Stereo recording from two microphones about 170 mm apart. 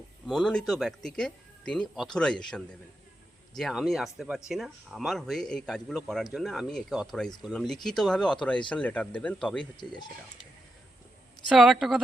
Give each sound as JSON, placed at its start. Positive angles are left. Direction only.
{"t": 0.3, "sound": "a man's voice", "side_deg": 5}
{"t": 9.7, "sound": "speech", "side_deg": 25}
{"t": 11.4, "sound": "a man's voice", "side_deg": -5}